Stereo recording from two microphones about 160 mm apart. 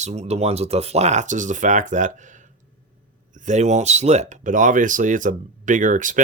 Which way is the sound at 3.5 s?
45° right (ahead or behind).